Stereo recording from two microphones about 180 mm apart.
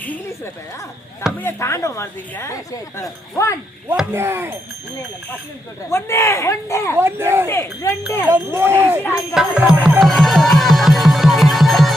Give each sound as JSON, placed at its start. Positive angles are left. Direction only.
{"t": 0.0, "sound": "a sound", "side_deg": 10}
{"t": 1.4, "sound": "speech", "side_deg": 15}
{"t": 3.8, "sound": "speech", "side_deg": -15}
{"t": 5.9, "sound": "speech", "side_deg": 15}
{"t": 6.9, "sound": "speech", "side_deg": -10}
{"t": 7.4, "sound": "speech", "side_deg": 15}
{"t": 8.3, "sound": "speech", "side_deg": -15}
{"t": 10.0, "sound": "music", "side_deg": 0}